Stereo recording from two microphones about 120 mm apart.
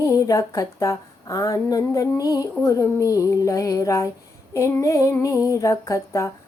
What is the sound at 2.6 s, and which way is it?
Female singing, 25° left (ahead or behind).